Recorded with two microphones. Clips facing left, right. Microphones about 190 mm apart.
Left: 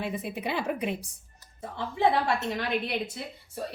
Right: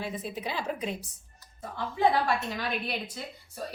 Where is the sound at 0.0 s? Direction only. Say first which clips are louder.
Left 2 dB; 60° left (ahead or behind).